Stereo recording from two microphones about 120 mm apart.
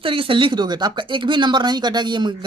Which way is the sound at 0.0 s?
45° right (ahead or behind).